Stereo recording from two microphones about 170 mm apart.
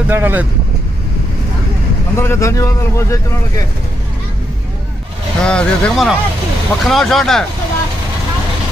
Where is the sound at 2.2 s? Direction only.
15° left (ahead or behind).